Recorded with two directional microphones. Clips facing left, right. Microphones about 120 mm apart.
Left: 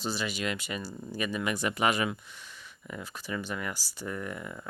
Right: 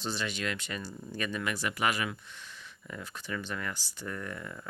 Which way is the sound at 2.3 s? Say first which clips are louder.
Even; 10° left (ahead or behind).